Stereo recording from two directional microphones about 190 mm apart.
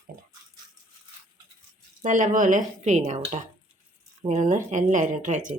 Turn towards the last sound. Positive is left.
turn(degrees=-40)  # may be behind; listen again after turning